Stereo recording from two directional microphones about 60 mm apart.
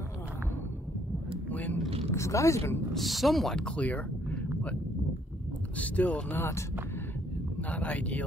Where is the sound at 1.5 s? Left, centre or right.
Left.